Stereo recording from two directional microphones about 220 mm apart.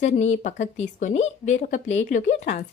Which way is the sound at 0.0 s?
35° left (ahead or behind).